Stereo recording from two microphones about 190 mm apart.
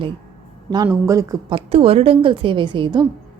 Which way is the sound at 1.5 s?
30° right (ahead or behind).